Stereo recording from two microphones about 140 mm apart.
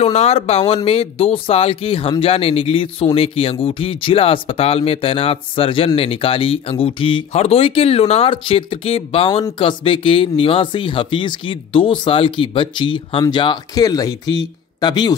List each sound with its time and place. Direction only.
0.0 s speech: 45° left (ahead or behind); by 15.1 s 30° left (ahead or behind)